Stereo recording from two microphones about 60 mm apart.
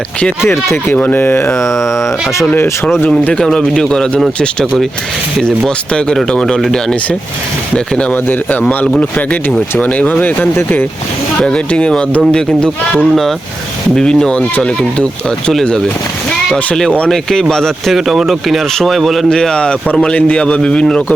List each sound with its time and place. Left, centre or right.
0.4 s speech: left
0.9 s speech: left
1.8 s speech: left
3.4 s a man's voice: centre
4.6 s speech: centre
5.4 s a man's voice: centre
8.1 s speech: left
11.3 s a man's voice: centre
17.1 s a man's voice: centre
19.3 s a man's voice: centre